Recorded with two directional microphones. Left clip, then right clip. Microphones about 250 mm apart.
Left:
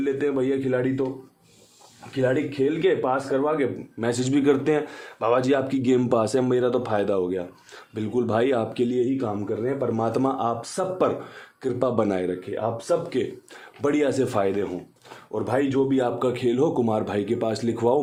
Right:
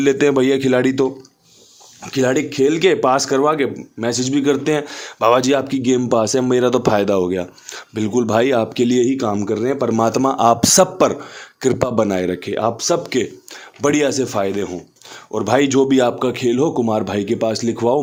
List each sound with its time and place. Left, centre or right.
0.0 s a man's voice: right
2.0 s speech: right
4.0 s speech: centre; by 10.0 s right
10.0 s speech: right
12.5 s speech: right
13.8 s speech: right
15.3 s speech: right